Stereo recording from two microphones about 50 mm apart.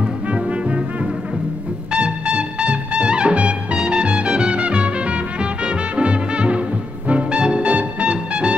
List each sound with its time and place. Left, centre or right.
0.0 s music: right
1.9 s music: right